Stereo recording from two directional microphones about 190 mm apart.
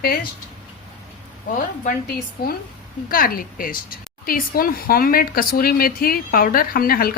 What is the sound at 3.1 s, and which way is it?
Speech, 50° left (ahead or behind).